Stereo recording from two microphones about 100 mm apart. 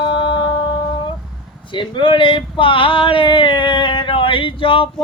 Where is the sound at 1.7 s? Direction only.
55° left (ahead or behind).